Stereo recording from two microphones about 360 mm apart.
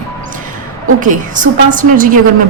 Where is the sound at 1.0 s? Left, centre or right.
Right.